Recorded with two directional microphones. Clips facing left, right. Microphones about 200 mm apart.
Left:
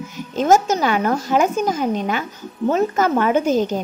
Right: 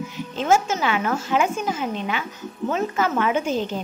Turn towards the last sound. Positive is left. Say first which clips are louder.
# left 6 dB
turn(degrees=40)  # may be behind; listen again after turning